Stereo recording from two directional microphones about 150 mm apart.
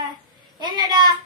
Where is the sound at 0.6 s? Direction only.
30° right (ahead or behind).